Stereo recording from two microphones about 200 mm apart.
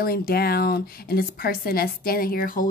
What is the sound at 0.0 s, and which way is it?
A woman's voice, 50° left (ahead or behind).